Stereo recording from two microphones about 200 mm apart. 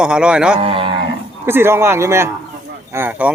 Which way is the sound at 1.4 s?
10° right (ahead or behind).